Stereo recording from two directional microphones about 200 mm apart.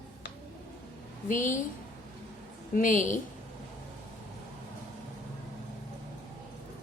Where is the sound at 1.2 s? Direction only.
40° left (ahead or behind).